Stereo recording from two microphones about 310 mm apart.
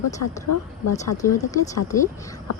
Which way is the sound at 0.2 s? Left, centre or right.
Left.